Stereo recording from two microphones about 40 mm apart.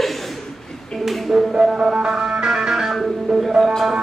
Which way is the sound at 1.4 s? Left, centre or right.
Centre.